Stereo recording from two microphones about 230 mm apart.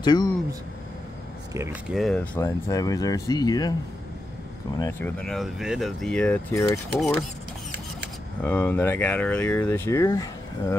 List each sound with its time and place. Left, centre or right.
0.0 s speech: centre
1.9 s speech: centre
4.7 s speech: centre
8.4 s speech: centre